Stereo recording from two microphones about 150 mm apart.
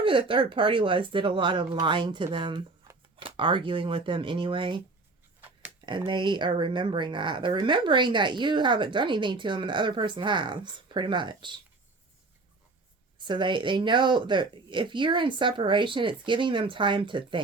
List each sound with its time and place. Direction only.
0.0 s speech: 35° right (ahead or behind)
6.1 s speech: 30° right (ahead or behind)
13.1 s speech: 30° right (ahead or behind)